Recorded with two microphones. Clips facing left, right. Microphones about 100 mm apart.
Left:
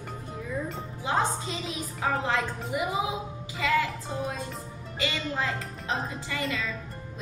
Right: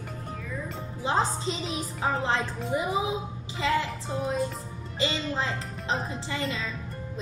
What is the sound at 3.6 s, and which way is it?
A woman's voice, 25° right (ahead or behind).